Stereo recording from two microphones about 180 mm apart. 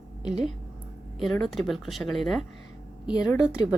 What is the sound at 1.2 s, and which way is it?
A woman's voice, centre (ahead or behind).